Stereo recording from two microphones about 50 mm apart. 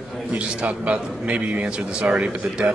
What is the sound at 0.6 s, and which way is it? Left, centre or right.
A man's voice, right.